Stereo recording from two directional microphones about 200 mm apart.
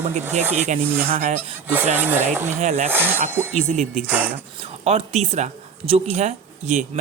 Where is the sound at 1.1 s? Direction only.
35° right (ahead or behind).